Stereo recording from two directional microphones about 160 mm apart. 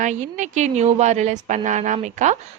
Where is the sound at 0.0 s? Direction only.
50° right (ahead or behind).